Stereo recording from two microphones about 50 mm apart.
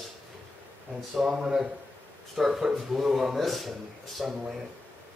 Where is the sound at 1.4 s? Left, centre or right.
Centre.